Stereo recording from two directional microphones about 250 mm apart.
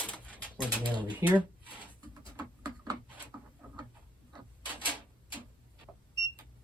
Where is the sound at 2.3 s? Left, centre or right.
Centre.